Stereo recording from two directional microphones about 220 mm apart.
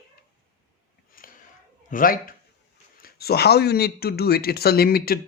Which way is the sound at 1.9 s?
40° left (ahead or behind).